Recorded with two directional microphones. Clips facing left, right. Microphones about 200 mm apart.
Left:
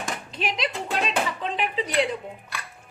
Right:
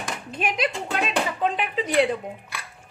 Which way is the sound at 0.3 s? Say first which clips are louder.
Right 5 dB; 50° right (ahead or behind).